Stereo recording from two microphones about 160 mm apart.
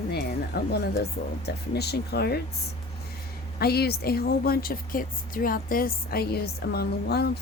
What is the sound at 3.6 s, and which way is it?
A woman's voice, 75° left (ahead or behind).